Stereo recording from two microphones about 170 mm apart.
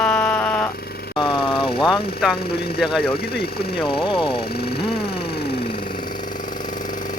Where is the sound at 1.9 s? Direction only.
Centre (ahead or behind).